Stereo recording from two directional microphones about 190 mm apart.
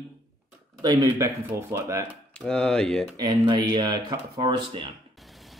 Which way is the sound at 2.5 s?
5° left (ahead or behind).